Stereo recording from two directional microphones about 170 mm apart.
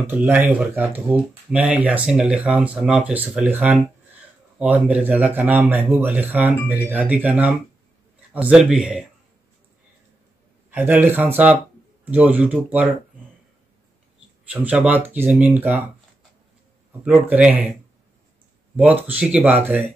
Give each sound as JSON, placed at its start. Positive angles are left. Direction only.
{"t": 0.0, "sound": "a man's voice", "side_deg": -10}
{"t": 10.7, "sound": "speech", "side_deg": -10}
{"t": 14.5, "sound": "speech", "side_deg": -10}
{"t": 17.0, "sound": "speech", "side_deg": -10}
{"t": 18.8, "sound": "speech", "side_deg": -10}